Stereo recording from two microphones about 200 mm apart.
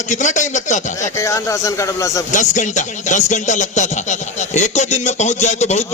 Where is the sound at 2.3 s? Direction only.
40° left (ahead or behind).